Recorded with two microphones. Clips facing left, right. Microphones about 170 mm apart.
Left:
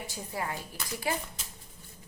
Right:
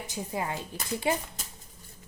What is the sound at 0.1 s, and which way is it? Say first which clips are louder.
A woman's voice: right 5 dB; 20° right (ahead or behind).